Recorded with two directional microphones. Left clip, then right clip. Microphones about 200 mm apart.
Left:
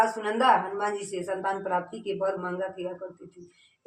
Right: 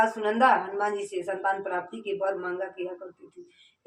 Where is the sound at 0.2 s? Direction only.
20° left (ahead or behind).